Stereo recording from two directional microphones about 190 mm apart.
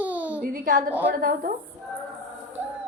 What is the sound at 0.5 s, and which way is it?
A woman's voice, 45° right (ahead or behind).